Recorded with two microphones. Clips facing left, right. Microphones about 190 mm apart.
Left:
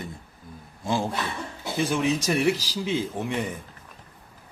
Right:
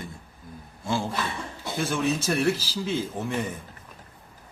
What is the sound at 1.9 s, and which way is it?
Speech, 15° left (ahead or behind).